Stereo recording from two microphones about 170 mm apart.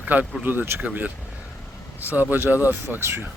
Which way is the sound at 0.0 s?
10° right (ahead or behind).